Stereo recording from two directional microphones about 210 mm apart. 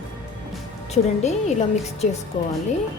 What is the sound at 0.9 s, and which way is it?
Speech, 30° left (ahead or behind).